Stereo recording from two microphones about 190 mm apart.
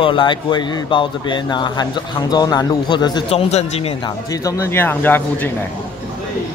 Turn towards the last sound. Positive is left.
turn(degrees=10)  # may be behind; listen again after turning